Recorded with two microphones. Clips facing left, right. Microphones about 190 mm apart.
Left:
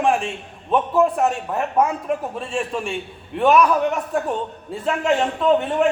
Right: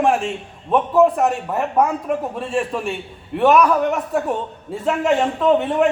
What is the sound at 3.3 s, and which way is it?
Speech, centre (ahead or behind).